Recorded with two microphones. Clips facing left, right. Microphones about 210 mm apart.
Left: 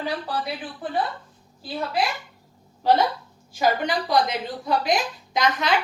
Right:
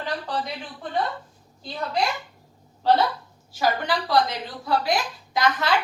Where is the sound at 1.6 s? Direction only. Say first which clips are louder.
Even; 5° left (ahead or behind).